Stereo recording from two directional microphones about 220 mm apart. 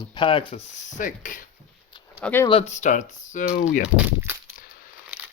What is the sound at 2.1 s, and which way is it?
Speech, 5° left (ahead or behind).